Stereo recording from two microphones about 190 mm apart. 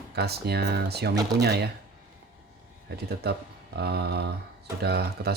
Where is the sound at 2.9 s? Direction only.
60° right (ahead or behind).